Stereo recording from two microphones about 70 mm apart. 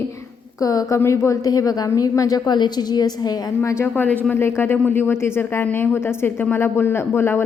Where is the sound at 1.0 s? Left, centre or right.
Left.